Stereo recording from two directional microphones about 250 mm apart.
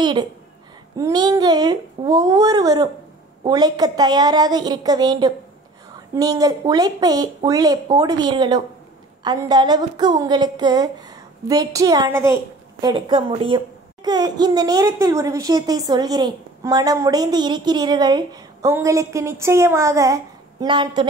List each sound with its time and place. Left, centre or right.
0.0 s a woman's voice: centre